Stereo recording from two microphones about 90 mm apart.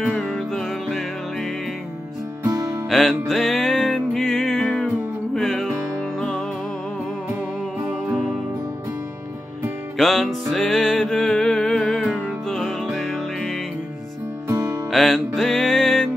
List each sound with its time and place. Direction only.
0.3 s music: centre (ahead or behind)
2.9 s music: centre (ahead or behind)
9.9 s music: 5° left (ahead or behind)
14.9 s music: 5° left (ahead or behind)